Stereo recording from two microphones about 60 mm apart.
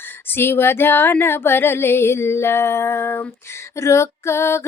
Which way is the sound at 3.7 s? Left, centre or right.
Left.